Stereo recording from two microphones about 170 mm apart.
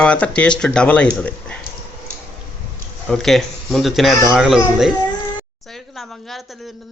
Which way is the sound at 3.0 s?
Centre (ahead or behind).